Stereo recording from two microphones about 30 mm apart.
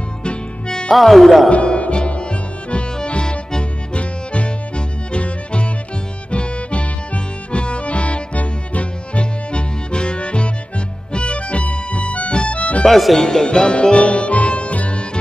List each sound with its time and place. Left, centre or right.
0.9 s speech: centre
1.5 s music: left
4.0 s music: left
12.8 s speech: centre
13.5 s music: left